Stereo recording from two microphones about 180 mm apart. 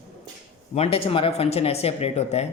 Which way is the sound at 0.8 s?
35° left (ahead or behind).